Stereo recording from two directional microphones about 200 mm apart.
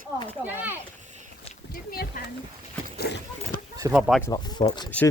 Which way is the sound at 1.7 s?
50° left (ahead or behind).